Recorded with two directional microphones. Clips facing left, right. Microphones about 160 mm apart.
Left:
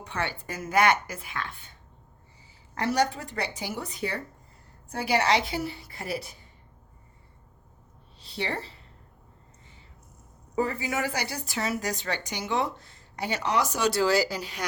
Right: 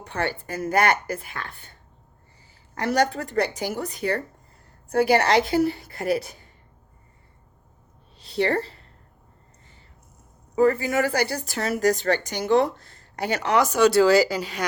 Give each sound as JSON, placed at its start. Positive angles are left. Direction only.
{"t": 0.0, "sound": "speech", "side_deg": -50}
{"t": 2.9, "sound": "speech", "side_deg": -65}
{"t": 3.8, "sound": "speech", "side_deg": -60}
{"t": 8.4, "sound": "speech", "side_deg": -60}
{"t": 10.6, "sound": "speech", "side_deg": -55}
{"t": 13.2, "sound": "speech", "side_deg": -55}
{"t": 13.7, "sound": "speech", "side_deg": -90}